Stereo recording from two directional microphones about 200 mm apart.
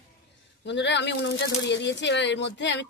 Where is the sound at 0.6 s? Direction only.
60° left (ahead or behind).